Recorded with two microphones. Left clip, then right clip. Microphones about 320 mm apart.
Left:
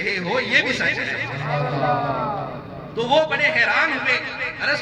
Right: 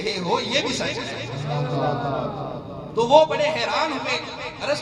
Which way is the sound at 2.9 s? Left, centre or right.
Right.